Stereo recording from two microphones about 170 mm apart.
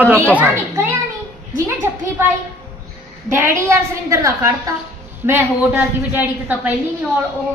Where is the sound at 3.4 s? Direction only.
15° right (ahead or behind).